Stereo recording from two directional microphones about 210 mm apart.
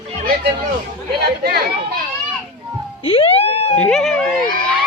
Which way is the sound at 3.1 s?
25° left (ahead or behind).